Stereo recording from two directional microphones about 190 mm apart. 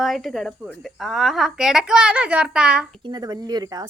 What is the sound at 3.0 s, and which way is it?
Speech, 20° right (ahead or behind).